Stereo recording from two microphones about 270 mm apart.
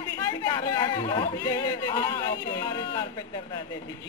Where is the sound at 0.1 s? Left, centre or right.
Centre.